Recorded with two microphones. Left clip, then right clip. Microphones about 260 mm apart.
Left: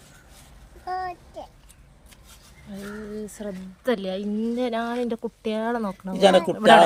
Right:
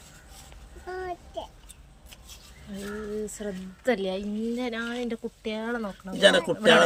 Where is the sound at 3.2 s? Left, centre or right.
Centre.